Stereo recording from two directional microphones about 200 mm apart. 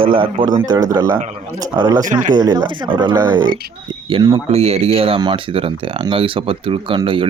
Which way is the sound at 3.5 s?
50° right (ahead or behind).